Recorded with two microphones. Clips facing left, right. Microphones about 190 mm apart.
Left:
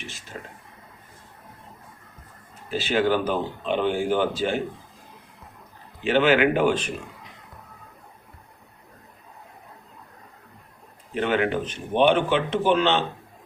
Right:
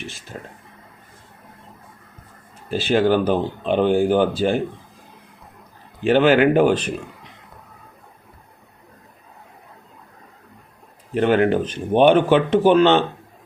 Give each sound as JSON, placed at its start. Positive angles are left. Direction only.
{"t": 2.9, "sound": "speech", "side_deg": -35}
{"t": 6.1, "sound": "speech", "side_deg": -40}
{"t": 11.2, "sound": "speech", "side_deg": -40}